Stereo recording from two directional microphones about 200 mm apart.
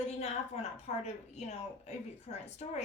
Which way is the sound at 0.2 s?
35° left (ahead or behind).